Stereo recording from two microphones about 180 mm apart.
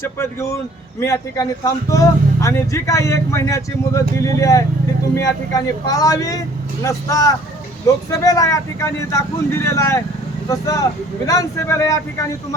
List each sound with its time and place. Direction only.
0.2 s a man's voice: 15° left (ahead or behind)